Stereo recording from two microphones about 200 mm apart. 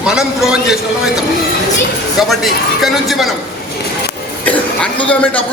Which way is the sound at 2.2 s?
Centre (ahead or behind).